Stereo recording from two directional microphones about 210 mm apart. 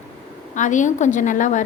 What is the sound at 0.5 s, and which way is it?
A woman's voice, 35° left (ahead or behind).